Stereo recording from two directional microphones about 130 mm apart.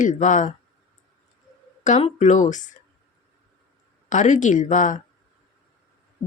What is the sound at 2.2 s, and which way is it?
Speech, 70° left (ahead or behind).